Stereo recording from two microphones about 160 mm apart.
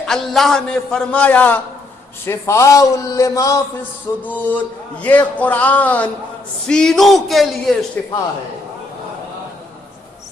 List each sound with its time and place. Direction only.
0.0 s a man's voice: centre (ahead or behind); by 3.6 s 20° left (ahead or behind)
4.2 s a man's voice: 10° left (ahead or behind)